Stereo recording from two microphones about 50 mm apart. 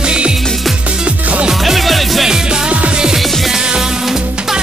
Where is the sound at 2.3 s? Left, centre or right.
Centre.